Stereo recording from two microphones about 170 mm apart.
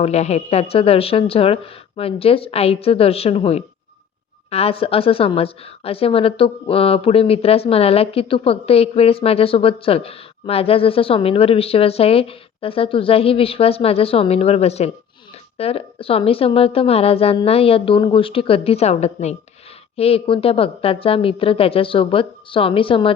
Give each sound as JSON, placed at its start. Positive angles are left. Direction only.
{"t": 0.0, "sound": "a woman's voice", "side_deg": 40}